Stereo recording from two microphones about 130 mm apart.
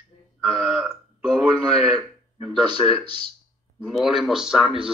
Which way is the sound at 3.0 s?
50° left (ahead or behind).